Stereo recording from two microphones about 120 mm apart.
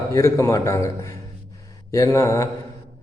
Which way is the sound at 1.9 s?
25° left (ahead or behind).